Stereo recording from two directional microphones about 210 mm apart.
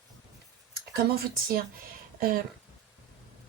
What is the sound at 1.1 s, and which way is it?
Speech, 45° right (ahead or behind).